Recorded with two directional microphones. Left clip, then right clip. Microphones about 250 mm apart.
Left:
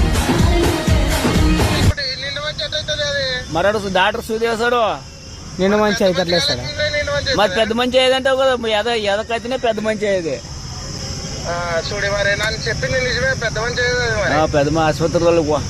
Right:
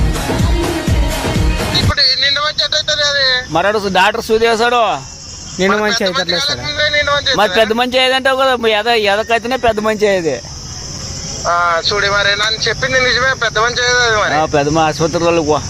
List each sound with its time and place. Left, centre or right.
2.0 s a sound: right
5.6 s speech: centre
6.1 s a man's voice: right
11.4 s a man's voice: right